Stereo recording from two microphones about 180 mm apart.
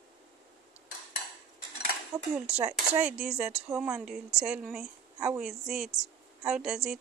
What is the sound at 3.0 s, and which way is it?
Speech, 5° right (ahead or behind).